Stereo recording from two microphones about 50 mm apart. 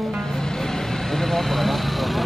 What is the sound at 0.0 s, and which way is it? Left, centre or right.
Vehicle, centre.